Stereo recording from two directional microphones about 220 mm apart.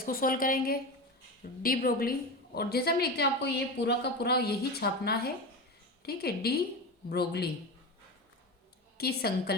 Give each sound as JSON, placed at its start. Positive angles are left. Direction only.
{"t": 0.0, "sound": "a woman's voice", "side_deg": 40}
{"t": 9.0, "sound": "a woman's voice", "side_deg": 45}